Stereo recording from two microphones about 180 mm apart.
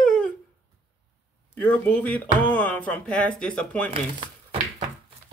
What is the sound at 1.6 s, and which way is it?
Speech, 10° left (ahead or behind).